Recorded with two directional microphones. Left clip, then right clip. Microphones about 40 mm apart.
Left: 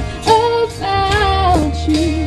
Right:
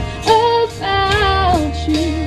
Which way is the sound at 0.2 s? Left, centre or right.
Right.